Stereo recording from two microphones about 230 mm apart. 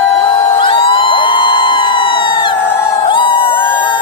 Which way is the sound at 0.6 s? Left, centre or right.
Left.